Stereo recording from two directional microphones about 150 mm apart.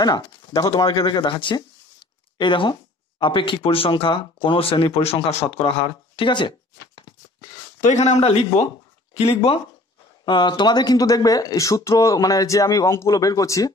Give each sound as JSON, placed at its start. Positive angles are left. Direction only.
{"t": 0.6, "sound": "speech", "side_deg": 25}
{"t": 7.8, "sound": "a man's voice", "side_deg": 50}
{"t": 10.2, "sound": "speech", "side_deg": 30}